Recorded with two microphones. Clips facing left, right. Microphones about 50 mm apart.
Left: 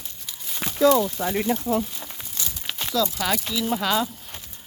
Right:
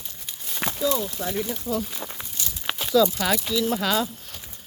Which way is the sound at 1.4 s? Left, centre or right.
Left.